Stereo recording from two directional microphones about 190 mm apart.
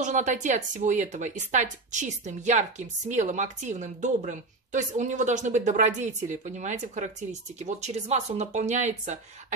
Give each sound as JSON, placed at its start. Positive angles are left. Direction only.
{"t": 0.0, "sound": "a woman's voice", "side_deg": -40}